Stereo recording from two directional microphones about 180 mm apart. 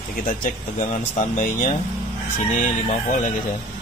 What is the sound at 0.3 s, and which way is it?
Speech, 45° left (ahead or behind).